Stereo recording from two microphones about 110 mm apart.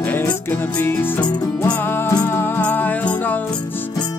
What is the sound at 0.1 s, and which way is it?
Music, 15° left (ahead or behind).